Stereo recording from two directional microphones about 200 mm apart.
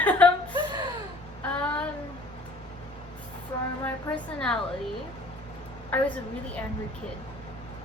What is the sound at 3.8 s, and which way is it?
Speech, 5° left (ahead or behind).